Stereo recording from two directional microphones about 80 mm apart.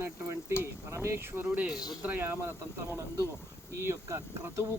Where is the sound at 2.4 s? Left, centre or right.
Right.